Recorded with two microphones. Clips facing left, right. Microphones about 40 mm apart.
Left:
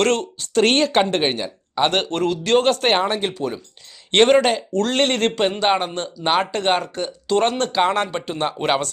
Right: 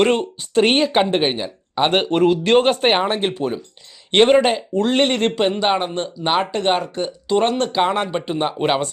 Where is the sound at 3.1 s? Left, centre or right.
Right.